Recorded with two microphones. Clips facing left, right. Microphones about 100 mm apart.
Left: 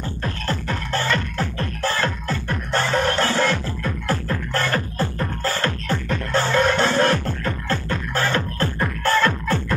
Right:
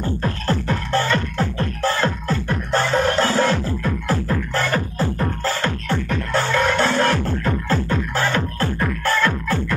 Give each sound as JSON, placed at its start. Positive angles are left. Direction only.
{"t": 0.5, "sound": "music", "side_deg": -25}